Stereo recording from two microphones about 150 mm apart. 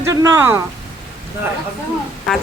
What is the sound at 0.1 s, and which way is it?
Speech, 20° right (ahead or behind).